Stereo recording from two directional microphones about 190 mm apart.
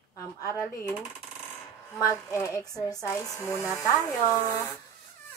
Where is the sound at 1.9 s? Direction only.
15° left (ahead or behind).